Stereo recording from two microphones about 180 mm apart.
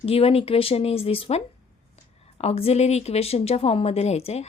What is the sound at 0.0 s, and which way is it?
Speech, 35° left (ahead or behind).